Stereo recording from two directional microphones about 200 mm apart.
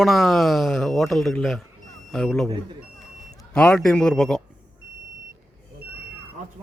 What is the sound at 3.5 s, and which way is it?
Speech, 5° left (ahead or behind).